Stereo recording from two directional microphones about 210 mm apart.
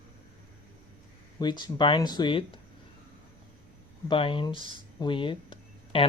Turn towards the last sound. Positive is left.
turn(degrees=25)  # may be behind; listen again after turning